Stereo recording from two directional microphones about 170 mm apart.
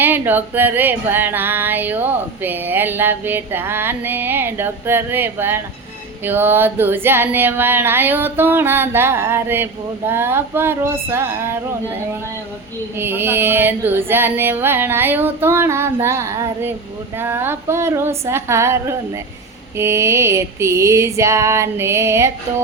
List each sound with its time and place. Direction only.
0.0 s female singing: 10° right (ahead or behind)
13.0 s female singing: 15° right (ahead or behind)